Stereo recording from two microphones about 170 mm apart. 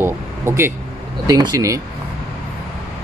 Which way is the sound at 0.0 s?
15° right (ahead or behind).